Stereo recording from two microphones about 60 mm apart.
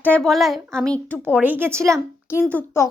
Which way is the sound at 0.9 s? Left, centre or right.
Left.